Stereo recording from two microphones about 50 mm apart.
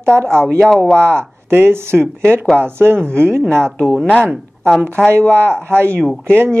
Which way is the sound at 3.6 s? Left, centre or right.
Centre.